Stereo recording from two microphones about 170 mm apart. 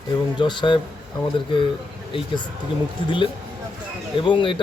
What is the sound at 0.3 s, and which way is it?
Speech, 25° left (ahead or behind).